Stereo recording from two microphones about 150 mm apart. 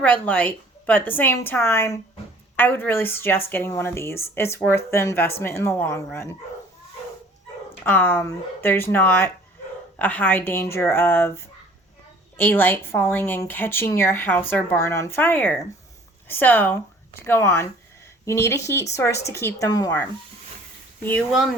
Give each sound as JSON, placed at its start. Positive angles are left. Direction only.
{"t": 0.0, "sound": "speech", "side_deg": 10}
{"t": 7.9, "sound": "speech", "side_deg": 15}